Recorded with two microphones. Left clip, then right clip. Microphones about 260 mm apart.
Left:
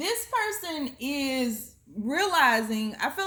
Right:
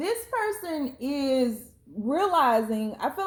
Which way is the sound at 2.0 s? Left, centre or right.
Left.